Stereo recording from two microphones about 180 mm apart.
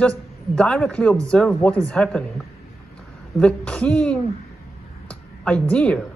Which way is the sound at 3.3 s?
5° left (ahead or behind).